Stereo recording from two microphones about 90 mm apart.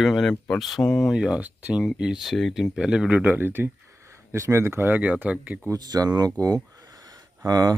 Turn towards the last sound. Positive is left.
turn(degrees=-45)  # may be behind; listen again after turning